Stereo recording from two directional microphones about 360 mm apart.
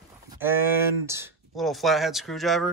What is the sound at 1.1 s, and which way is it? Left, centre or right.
Speech, centre.